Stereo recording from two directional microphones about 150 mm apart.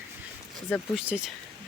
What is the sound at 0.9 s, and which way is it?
Speech, 5° right (ahead or behind).